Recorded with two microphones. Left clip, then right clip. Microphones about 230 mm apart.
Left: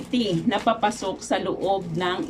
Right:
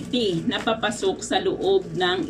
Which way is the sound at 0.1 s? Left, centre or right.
Left.